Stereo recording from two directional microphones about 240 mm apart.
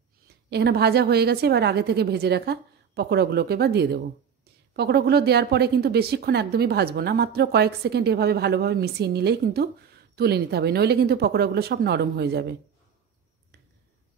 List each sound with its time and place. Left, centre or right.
0.5 s a woman's voice: right